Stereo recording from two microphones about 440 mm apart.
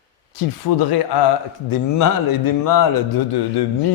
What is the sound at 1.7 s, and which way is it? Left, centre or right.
A man's voice, left.